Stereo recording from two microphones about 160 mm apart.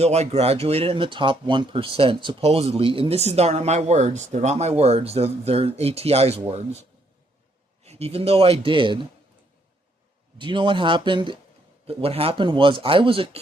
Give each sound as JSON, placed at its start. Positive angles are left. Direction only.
{"t": 0.0, "sound": "speech", "side_deg": -40}
{"t": 7.9, "sound": "speech", "side_deg": -40}
{"t": 10.3, "sound": "speech", "side_deg": -30}